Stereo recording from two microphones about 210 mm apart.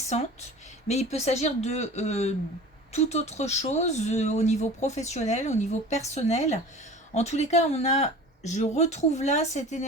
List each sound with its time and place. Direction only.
0.9 s speech: 30° left (ahead or behind)